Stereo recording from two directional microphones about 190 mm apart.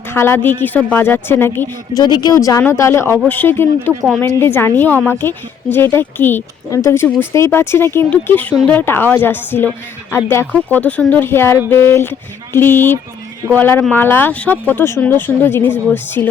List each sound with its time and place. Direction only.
0.1 s a woman's voice: 10° left (ahead or behind)